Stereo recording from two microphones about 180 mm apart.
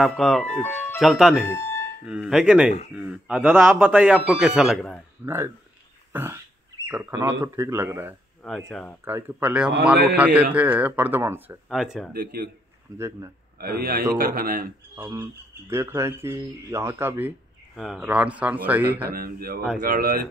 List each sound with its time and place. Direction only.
0.0 s speech: 5° left (ahead or behind)
1.5 s music: 15° left (ahead or behind)
2.0 s speech: 5° right (ahead or behind)
5.2 s speech: 15° right (ahead or behind)
8.6 s speech: 5° left (ahead or behind)
9.0 s speech: 10° right (ahead or behind)
12.1 s a man's voice: 60° right (ahead or behind)
12.9 s speech: 15° right (ahead or behind)
13.6 s a man's voice: 60° right (ahead or behind)
15.0 s speech: 15° right (ahead or behind)
17.7 s speech: centre (ahead or behind)
19.0 s a man's voice: 55° right (ahead or behind)